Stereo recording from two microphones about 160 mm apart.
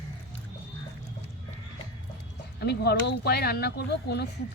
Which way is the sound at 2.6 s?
90° left.